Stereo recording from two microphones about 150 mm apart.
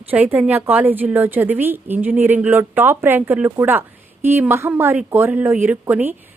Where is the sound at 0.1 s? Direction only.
10° right (ahead or behind).